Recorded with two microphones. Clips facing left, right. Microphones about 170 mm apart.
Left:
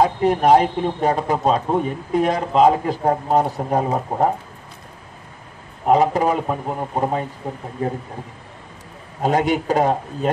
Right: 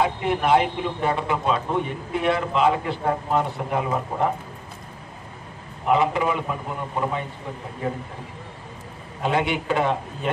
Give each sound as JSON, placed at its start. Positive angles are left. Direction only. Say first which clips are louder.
{"t": 0.0, "sound": "a man's voice", "louder": "left 6 dB", "side_deg": 40}
{"t": 5.9, "sound": "a man's voice", "louder": "left 4 dB", "side_deg": 40}
{"t": 9.2, "sound": "a man's voice", "louder": "left 5 dB", "side_deg": 40}